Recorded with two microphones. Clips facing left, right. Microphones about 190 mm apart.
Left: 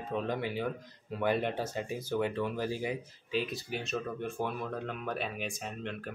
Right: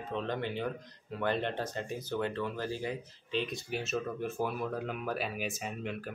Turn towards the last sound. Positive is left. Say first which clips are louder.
# right 1 dB
turn(degrees=-5)  # may be behind; listen again after turning